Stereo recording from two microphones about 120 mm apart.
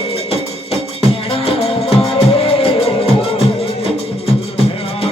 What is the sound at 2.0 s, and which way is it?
Music, 55° left (ahead or behind).